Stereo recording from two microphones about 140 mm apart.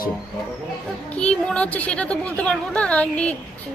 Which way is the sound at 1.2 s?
5° left (ahead or behind).